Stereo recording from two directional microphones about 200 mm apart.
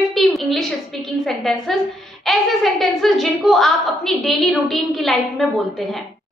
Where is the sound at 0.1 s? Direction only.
Centre (ahead or behind).